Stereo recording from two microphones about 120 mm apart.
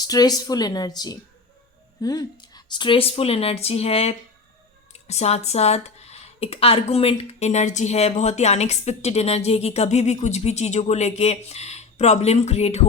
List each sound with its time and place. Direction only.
0.0 s a woman's voice: 35° left (ahead or behind); by 12.8 s 65° left (ahead or behind)